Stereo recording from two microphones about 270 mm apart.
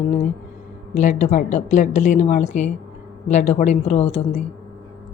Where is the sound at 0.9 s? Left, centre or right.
Left.